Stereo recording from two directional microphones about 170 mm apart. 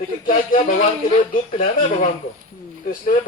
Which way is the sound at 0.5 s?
55° left (ahead or behind).